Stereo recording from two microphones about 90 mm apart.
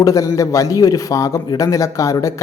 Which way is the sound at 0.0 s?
40° left (ahead or behind).